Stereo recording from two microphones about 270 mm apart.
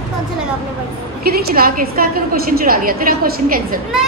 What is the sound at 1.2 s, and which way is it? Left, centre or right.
A woman's voice, right.